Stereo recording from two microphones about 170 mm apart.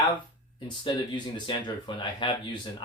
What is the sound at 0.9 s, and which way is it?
Speech, 25° left (ahead or behind).